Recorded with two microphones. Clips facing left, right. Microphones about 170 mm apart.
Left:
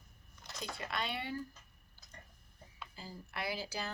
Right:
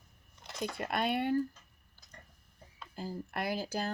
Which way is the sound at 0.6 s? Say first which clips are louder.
Right 7 dB; 50° right (ahead or behind).